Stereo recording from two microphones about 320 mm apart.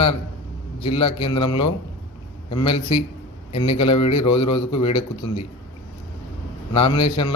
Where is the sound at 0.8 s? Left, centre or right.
Centre.